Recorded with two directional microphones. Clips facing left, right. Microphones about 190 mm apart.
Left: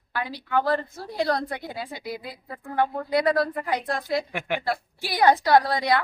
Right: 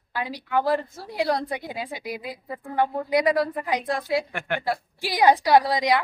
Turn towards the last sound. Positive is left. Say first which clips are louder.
# right 1 dB
turn(degrees=-15)  # may be behind; listen again after turning